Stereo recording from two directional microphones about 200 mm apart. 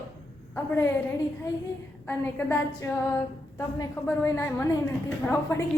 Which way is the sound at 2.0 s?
10° left (ahead or behind).